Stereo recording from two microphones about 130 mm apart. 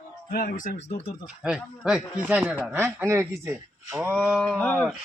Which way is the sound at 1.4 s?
5° right (ahead or behind).